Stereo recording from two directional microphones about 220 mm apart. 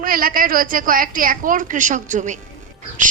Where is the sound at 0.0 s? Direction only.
40° right (ahead or behind).